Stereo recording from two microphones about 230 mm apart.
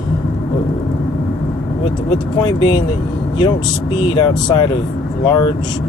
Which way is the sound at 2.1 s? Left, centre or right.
Centre.